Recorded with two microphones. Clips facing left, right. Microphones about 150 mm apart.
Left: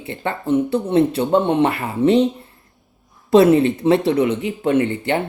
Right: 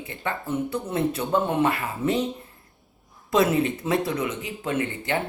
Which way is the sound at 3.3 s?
30° left (ahead or behind).